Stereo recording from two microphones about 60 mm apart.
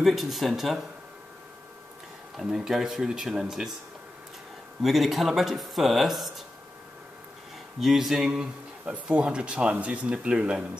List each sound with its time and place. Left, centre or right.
0.0 s speech: centre
2.3 s speech: centre
4.8 s speech: centre
7.8 s speech: centre
8.8 s speech: right